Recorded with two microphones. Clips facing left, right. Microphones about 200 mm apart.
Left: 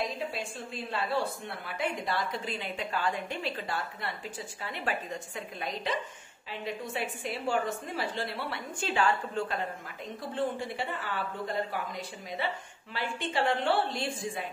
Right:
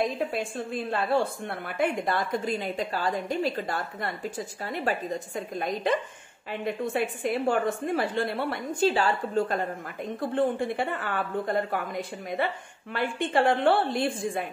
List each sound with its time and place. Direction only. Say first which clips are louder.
0.2 s a woman's voice: right 7 dB; 50° right (ahead or behind)
10.3 s a woman's voice: right 6 dB; 55° right (ahead or behind)